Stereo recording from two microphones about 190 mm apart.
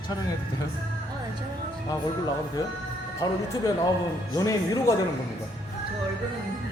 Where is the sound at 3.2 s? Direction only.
20° left (ahead or behind).